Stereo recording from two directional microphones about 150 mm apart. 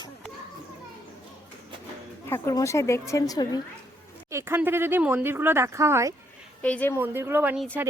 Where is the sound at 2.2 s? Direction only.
15° left (ahead or behind).